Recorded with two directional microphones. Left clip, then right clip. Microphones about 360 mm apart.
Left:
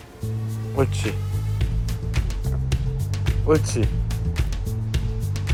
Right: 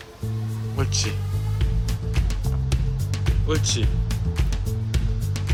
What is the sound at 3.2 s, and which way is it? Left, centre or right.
Music, centre.